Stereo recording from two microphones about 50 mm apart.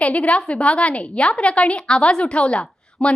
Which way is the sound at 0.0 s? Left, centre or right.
Left.